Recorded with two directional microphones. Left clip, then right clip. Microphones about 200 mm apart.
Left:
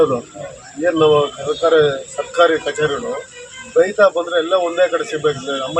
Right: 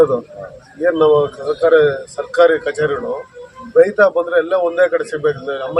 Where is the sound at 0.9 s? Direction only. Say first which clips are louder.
Right 1 dB; 15° right (ahead or behind).